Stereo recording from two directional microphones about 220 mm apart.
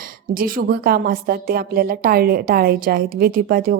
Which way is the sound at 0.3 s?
40° right (ahead or behind).